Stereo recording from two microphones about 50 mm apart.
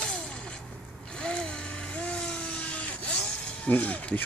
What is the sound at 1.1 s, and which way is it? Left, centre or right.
Vehicle, centre.